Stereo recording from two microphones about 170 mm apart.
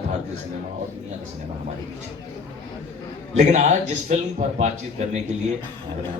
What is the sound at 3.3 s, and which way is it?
A man's voice, 45° right (ahead or behind).